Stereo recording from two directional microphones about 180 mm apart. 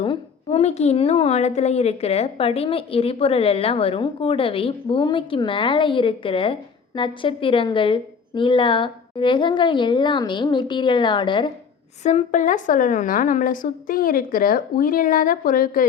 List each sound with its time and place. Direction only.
0.0 s a woman's voice: 30° left (ahead or behind)
12.0 s a woman's voice: 40° left (ahead or behind)